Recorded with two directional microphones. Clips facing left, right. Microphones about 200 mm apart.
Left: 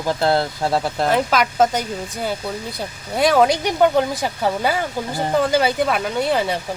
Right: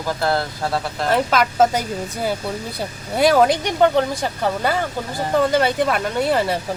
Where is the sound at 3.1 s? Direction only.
5° right (ahead or behind).